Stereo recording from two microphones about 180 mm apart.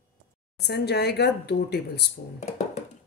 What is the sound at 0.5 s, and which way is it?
Speech, 65° left (ahead or behind).